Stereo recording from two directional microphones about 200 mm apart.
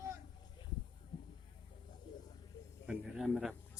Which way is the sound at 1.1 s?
25° left (ahead or behind).